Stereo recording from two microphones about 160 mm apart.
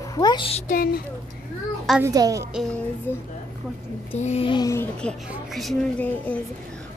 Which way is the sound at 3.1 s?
15° left (ahead or behind).